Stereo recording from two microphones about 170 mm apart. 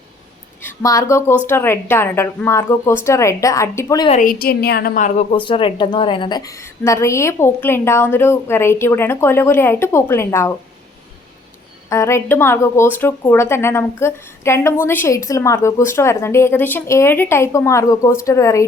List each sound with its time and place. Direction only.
0.6 s a woman's voice: 20° left (ahead or behind)
4.2 s a woman's voice: 60° left (ahead or behind)
5.3 s a woman's voice: 30° left (ahead or behind)
11.9 s a woman's voice: 15° left (ahead or behind)